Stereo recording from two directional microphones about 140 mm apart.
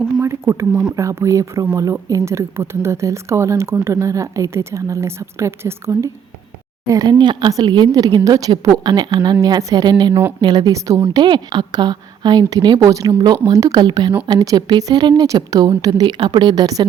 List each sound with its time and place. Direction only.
0.2 s speech: 20° right (ahead or behind)
0.7 s speech: 10° right (ahead or behind)
0.9 s a woman's voice: 20° right (ahead or behind)